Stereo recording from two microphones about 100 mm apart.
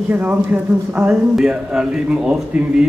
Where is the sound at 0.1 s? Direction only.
15° right (ahead or behind).